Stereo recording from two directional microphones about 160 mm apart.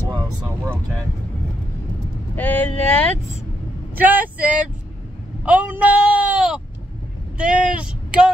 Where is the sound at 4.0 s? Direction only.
10° right (ahead or behind).